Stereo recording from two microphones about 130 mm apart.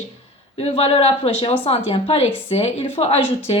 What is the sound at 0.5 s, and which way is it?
A woman's voice, 50° left (ahead or behind).